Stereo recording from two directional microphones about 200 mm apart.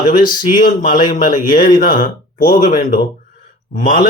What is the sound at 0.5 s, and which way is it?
A man's voice, 40° left (ahead or behind).